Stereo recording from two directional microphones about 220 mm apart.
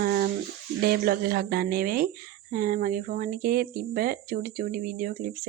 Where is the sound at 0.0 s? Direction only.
45° right (ahead or behind).